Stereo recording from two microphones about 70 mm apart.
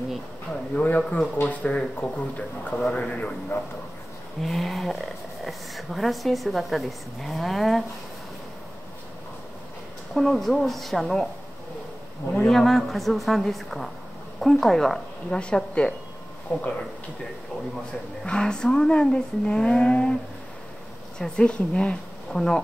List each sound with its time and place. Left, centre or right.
0.7 s speech: centre
2.7 s speech: centre
3.0 s speech: left
3.5 s a man's voice: left
4.4 s speech: centre
10.1 s speech: centre
12.3 s speech: centre; by 16.6 s left
18.2 s speech: centre
21.2 s speech: centre